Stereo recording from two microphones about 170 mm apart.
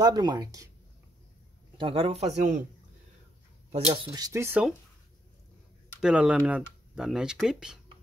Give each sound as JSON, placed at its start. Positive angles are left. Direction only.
{"t": 0.0, "sound": "speech", "side_deg": -25}
{"t": 1.8, "sound": "speech", "side_deg": -35}
{"t": 3.7, "sound": "speech", "side_deg": -35}
{"t": 5.9, "sound": "speech", "side_deg": -5}